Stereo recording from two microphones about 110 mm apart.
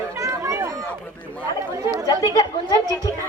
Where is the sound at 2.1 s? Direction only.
35° left (ahead or behind).